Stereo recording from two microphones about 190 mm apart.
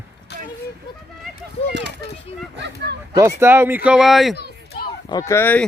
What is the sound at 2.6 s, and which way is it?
Speech, 65° right (ahead or behind).